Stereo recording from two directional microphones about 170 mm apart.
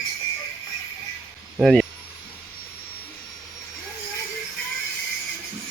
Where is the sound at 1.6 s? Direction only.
Centre (ahead or behind).